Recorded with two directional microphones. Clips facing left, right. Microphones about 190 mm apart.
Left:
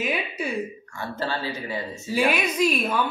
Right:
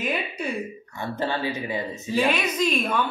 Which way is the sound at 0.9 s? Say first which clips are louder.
Right 4 dB; 20° right (ahead or behind).